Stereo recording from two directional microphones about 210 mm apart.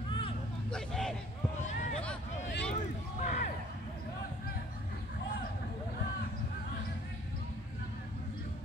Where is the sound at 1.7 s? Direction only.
35° left (ahead or behind).